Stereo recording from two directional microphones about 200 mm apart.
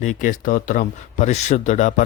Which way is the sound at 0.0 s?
40° left (ahead or behind).